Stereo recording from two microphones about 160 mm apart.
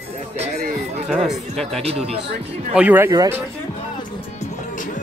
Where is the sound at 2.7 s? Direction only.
10° right (ahead or behind).